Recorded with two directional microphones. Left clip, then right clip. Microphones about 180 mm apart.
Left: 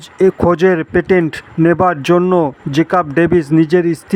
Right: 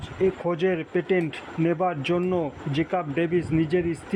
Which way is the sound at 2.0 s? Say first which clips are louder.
Left 13 dB; 40° left (ahead or behind).